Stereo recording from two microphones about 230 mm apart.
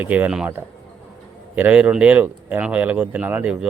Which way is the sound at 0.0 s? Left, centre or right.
Centre.